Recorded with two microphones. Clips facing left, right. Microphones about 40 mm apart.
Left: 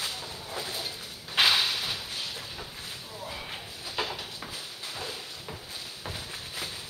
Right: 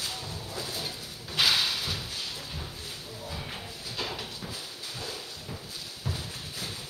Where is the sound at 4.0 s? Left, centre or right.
Left.